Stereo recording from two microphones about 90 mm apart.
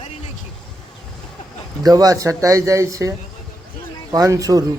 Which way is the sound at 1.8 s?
45° right (ahead or behind).